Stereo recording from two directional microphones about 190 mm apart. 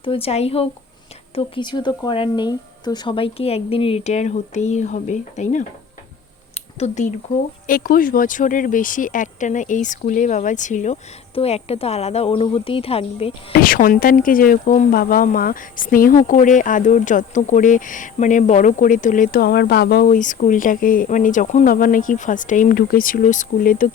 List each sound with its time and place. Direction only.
0.0 s speech: 30° left (ahead or behind)
6.7 s speech: 35° left (ahead or behind)
7.7 s speech: 50° left (ahead or behind); by 13.3 s 30° left (ahead or behind)
13.6 s speech: 45° left (ahead or behind)
20.1 s speech: 40° left (ahead or behind)